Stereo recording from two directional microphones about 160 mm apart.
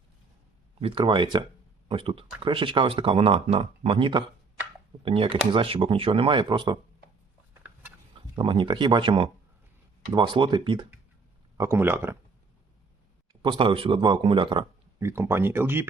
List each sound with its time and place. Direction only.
0.8 s speech: 35° right (ahead or behind)
8.4 s speech: 30° right (ahead or behind)
11.5 s speech: 15° right (ahead or behind)
13.4 s speech: 35° right (ahead or behind)
14.9 s speech: 15° right (ahead or behind)